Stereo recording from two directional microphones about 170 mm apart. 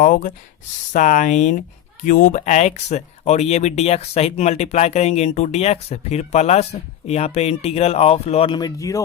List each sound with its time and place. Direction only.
0.0 s speech: 55° left (ahead or behind); by 9.0 s 20° left (ahead or behind)